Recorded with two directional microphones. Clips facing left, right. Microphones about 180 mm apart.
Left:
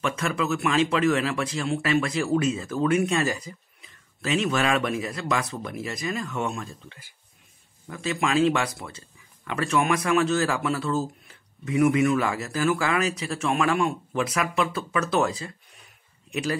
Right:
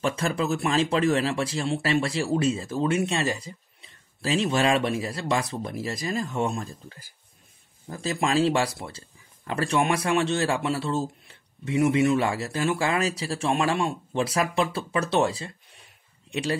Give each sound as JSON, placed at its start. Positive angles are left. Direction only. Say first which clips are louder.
{"t": 0.0, "sound": "speech", "louder": "right 1 dB", "side_deg": -30}